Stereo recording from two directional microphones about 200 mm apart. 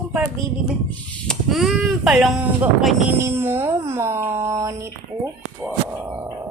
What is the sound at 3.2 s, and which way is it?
Speech, 10° right (ahead or behind).